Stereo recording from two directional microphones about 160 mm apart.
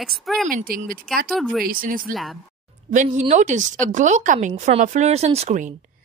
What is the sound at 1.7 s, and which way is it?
Speech, 60° right (ahead or behind).